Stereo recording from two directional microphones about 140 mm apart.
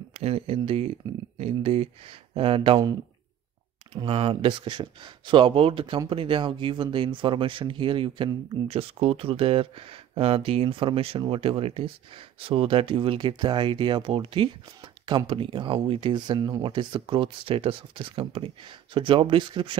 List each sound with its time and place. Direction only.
0.1 s speech: 45° right (ahead or behind)
3.9 s speech: 40° right (ahead or behind)